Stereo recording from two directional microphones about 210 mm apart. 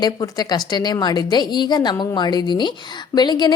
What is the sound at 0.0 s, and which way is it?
A woman's voice, 20° left (ahead or behind).